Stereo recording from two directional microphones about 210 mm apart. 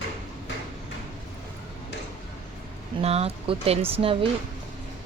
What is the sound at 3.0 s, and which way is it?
Speech, 30° right (ahead or behind).